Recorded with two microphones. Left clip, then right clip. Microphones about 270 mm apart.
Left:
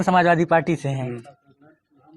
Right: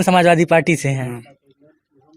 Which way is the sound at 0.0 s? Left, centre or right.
Right.